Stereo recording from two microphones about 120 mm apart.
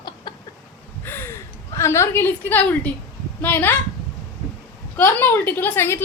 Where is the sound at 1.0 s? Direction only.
20° left (ahead or behind).